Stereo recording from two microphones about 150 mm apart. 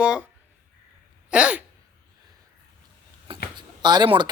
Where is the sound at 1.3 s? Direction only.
10° right (ahead or behind).